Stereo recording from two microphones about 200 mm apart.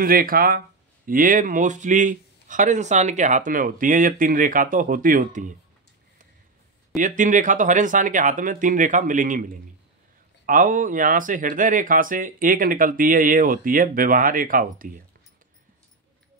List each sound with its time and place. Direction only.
0.0 s speech: 45° right (ahead or behind)
7.0 s speech: 40° right (ahead or behind)